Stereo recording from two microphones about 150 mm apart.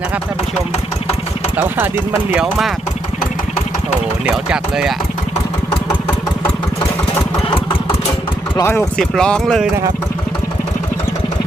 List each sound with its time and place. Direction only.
1.5 s speech: 15° right (ahead or behind)
2.3 s speech: centre (ahead or behind)
4.3 s speech: 5° right (ahead or behind)
8.5 s speech: 20° left (ahead or behind)
9.0 s speech: 5° left (ahead or behind)